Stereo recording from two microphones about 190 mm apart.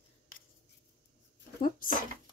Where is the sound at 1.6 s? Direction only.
45° left (ahead or behind).